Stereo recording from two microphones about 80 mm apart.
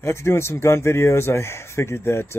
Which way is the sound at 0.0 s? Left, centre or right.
Left.